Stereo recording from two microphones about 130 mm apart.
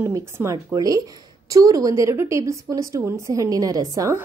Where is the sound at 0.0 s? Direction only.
20° right (ahead or behind).